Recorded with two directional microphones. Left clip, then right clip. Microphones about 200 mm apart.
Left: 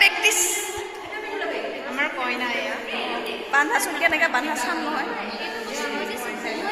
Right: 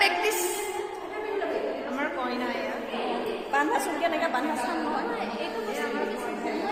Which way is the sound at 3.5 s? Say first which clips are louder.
Left 5 dB; 10° right (ahead or behind).